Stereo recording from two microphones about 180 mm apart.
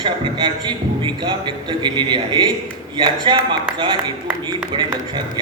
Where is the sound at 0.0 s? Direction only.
25° right (ahead or behind).